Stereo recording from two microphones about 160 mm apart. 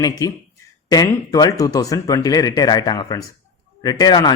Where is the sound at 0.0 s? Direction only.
25° left (ahead or behind).